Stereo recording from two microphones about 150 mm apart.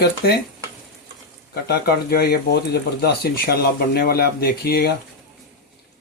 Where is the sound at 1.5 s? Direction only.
90° left.